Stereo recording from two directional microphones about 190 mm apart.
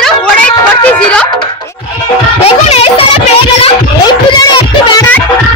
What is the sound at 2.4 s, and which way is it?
Speech, 35° left (ahead or behind).